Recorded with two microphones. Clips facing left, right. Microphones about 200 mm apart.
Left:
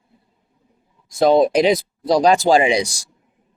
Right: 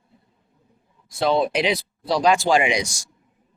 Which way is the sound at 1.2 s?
40° left (ahead or behind).